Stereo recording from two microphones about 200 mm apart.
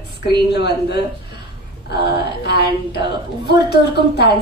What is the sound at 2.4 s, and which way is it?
A woman's voice, 55° left (ahead or behind).